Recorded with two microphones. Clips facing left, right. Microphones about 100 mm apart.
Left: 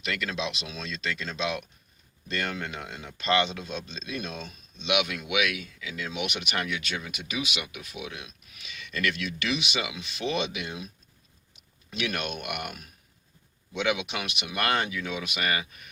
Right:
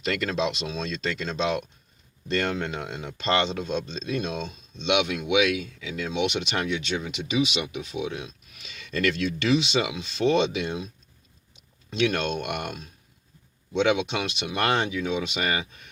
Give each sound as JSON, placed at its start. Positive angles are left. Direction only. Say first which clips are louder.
{"t": 0.0, "sound": "speech", "louder": "right 6 dB", "side_deg": -35}
{"t": 11.9, "sound": "speech", "louder": "right 7 dB", "side_deg": -30}